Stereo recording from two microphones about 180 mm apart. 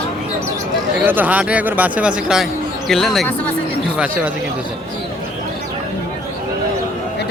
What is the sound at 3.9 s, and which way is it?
Speech, 10° right (ahead or behind).